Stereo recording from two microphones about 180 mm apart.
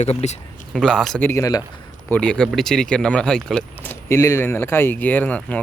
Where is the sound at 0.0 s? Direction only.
35° left (ahead or behind).